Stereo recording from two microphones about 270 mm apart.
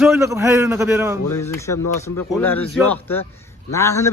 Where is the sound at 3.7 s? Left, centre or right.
Centre.